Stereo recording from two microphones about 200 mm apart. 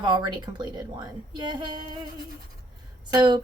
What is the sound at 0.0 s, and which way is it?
A woman's voice, 20° right (ahead or behind).